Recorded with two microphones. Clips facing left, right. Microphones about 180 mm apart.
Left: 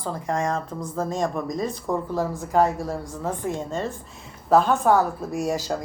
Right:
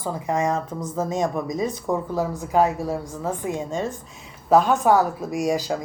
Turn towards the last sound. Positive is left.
turn(degrees=0)  # may be behind; listen again after turning